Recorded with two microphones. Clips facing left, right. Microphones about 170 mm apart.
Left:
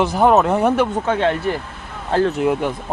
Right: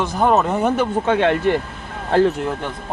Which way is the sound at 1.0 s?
15° right (ahead or behind).